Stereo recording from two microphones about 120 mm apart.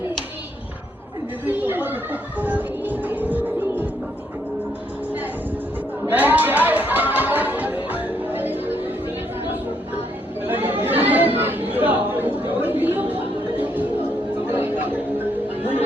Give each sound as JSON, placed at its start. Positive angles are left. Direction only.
{"t": 1.5, "sound": "chatter", "side_deg": -15}
{"t": 2.4, "sound": "music", "side_deg": -15}
{"t": 6.1, "sound": "chatter", "side_deg": -15}
{"t": 10.4, "sound": "chatter", "side_deg": -15}
{"t": 14.4, "sound": "chatter", "side_deg": -15}